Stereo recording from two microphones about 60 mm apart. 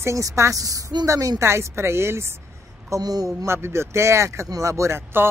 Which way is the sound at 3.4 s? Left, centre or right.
Right.